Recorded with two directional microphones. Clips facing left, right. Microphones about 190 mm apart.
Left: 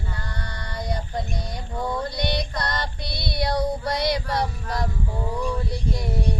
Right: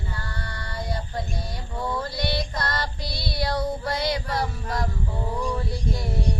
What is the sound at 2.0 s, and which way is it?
Female singing, 20° left (ahead or behind).